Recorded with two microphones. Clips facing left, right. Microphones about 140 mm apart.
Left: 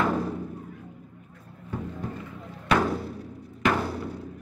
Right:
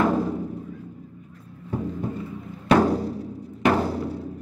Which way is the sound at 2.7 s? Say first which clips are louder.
Right 6 dB; 35° right (ahead or behind).